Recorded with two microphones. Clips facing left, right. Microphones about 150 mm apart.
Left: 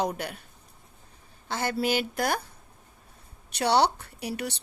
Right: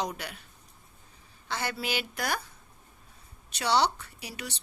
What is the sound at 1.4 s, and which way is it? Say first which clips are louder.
Speech: left 6 dB; 50° left (ahead or behind).